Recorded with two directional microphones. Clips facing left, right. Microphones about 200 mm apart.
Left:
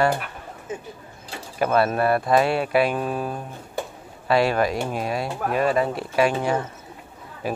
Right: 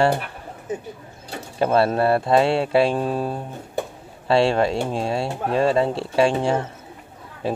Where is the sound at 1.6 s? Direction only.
30° right (ahead or behind).